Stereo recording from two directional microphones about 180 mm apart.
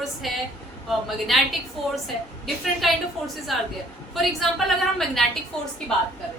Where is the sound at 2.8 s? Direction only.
Centre (ahead or behind).